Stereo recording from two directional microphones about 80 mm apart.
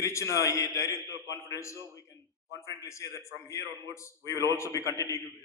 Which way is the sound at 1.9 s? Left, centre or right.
Left.